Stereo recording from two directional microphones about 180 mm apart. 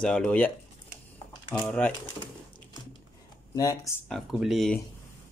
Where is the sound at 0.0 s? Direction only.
5° left (ahead or behind).